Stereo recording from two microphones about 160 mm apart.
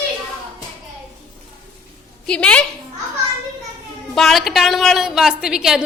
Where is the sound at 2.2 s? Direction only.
5° left (ahead or behind).